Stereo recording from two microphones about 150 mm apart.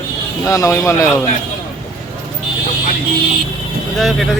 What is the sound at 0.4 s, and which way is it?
Speech, 20° left (ahead or behind).